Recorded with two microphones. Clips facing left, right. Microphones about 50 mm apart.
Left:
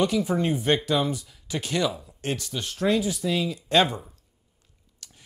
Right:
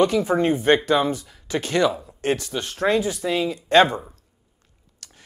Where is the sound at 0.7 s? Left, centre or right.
Right.